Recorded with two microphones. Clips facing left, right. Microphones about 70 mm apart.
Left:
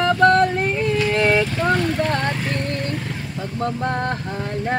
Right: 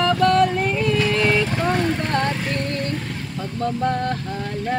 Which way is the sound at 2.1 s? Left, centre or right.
Centre.